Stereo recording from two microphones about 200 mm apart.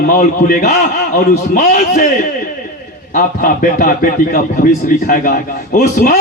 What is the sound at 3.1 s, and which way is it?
A man's voice, 40° left (ahead or behind).